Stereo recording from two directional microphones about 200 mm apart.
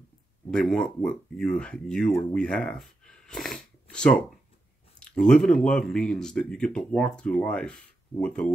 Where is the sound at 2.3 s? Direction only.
5° left (ahead or behind).